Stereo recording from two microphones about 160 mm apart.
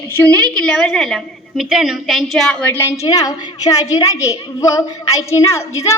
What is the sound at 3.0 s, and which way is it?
A woman's voice, 20° left (ahead or behind).